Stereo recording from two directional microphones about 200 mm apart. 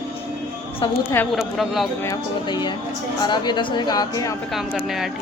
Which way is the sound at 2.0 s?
20° left (ahead or behind).